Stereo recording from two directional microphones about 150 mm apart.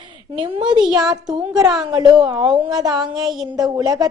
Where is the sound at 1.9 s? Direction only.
30° right (ahead or behind).